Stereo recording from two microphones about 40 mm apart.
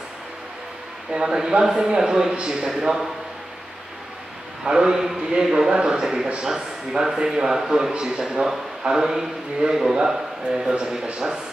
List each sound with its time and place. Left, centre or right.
1.1 s a man's voice: centre
4.6 s a man's voice: centre
10.7 s speech: right